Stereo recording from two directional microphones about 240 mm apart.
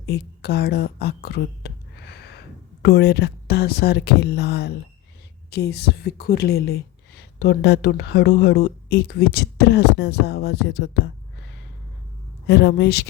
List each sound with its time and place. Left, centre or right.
0.0 s a sound: left
2.8 s a woman's voice: left
12.5 s a woman's voice: left